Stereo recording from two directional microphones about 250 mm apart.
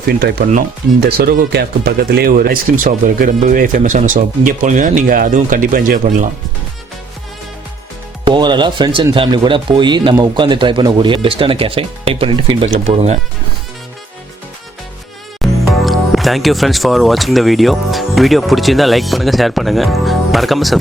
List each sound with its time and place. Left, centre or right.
0.1 s speech: right
8.2 s speech: centre
15.4 s music: centre
15.8 s speech: centre